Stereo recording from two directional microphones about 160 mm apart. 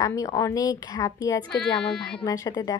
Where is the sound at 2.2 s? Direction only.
20° left (ahead or behind).